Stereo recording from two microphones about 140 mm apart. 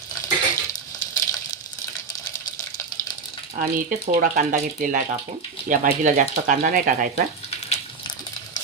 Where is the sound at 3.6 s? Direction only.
85° right.